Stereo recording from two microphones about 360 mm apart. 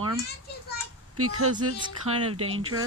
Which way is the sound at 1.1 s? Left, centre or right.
Right.